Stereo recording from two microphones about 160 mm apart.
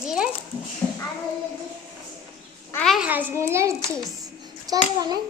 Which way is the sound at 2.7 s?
Centre (ahead or behind).